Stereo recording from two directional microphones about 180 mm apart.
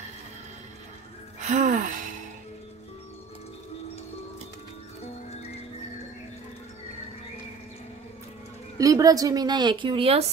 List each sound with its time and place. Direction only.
1.4 s speech: 45° right (ahead or behind)
8.7 s speech: 20° right (ahead or behind)